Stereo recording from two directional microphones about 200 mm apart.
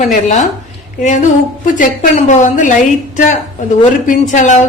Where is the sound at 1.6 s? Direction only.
40° left (ahead or behind).